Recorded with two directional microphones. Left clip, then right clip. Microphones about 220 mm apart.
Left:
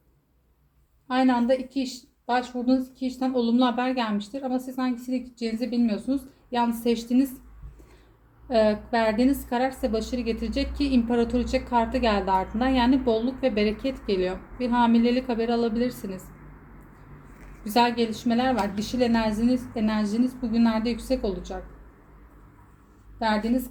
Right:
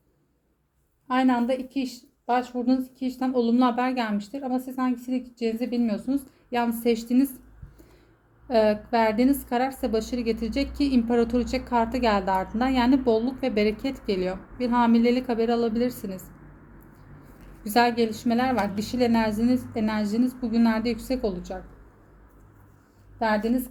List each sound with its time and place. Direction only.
1.1 s a woman's voice: 35° right (ahead or behind)
8.4 s a woman's voice: 35° right (ahead or behind)
17.6 s a woman's voice: 40° right (ahead or behind)
23.2 s a woman's voice: 40° right (ahead or behind)